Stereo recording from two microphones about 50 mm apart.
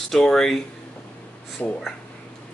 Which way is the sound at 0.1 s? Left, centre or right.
Centre.